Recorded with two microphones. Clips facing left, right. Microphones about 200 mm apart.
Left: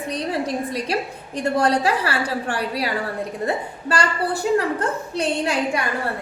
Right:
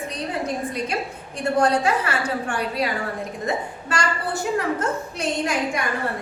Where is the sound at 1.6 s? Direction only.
35° left (ahead or behind).